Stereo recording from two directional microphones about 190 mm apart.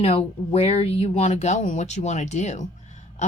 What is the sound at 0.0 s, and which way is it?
A woman's voice, 30° left (ahead or behind).